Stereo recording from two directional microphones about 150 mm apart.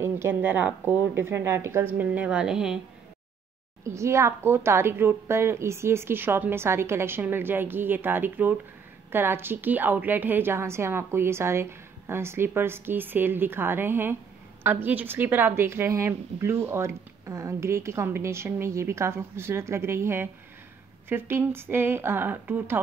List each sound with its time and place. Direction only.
0.0 s a woman's voice: 15° right (ahead or behind)
3.8 s a woman's voice: 20° right (ahead or behind)